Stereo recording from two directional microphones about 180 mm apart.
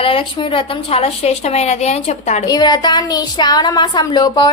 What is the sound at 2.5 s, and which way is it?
Speech, 25° left (ahead or behind).